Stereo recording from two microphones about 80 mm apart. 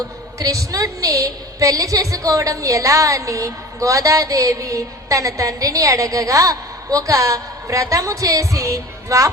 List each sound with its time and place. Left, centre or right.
0.3 s a woman's voice: right